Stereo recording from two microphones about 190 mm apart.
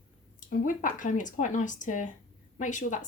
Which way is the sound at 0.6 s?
45° left (ahead or behind).